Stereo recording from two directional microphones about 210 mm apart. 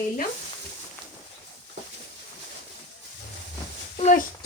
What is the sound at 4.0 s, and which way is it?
Speech, 40° left (ahead or behind).